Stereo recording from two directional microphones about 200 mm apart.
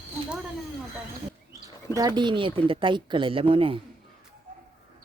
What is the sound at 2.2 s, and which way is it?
Speech, 25° right (ahead or behind).